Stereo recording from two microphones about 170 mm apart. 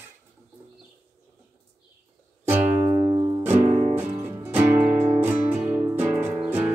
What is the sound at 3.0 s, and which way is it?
Music, 25° right (ahead or behind).